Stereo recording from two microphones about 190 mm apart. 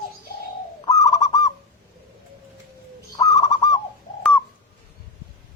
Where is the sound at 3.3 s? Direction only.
20° left (ahead or behind).